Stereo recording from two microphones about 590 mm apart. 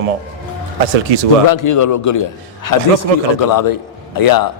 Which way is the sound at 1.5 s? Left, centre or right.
Left.